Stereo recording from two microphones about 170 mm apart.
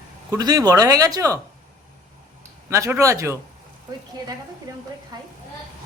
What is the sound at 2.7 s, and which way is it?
Speech, 15° right (ahead or behind).